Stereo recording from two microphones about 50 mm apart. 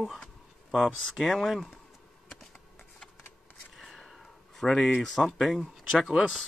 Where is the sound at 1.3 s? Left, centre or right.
Centre.